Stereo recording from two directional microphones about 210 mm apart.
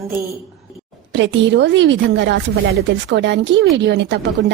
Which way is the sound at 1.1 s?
60° right (ahead or behind).